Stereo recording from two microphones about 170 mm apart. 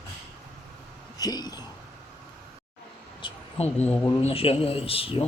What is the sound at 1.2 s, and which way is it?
Speech, 25° left (ahead or behind).